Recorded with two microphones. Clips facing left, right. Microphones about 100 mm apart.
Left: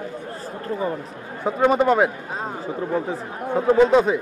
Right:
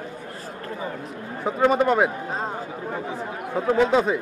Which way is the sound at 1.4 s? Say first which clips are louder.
Left 2 dB; centre (ahead or behind).